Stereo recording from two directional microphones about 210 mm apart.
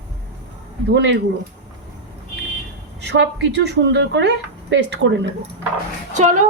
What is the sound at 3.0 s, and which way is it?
A woman's voice, 55° right (ahead or behind).